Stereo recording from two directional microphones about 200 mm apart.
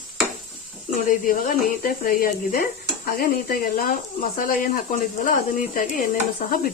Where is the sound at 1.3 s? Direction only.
45° left (ahead or behind).